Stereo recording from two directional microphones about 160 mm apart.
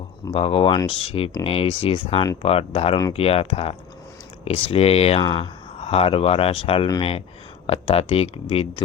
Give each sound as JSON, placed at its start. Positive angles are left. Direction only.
{"t": 0.3, "sound": "speech", "side_deg": 35}